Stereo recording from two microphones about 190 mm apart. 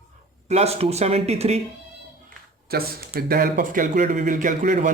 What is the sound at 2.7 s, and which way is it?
A man's voice, 50° right (ahead or behind).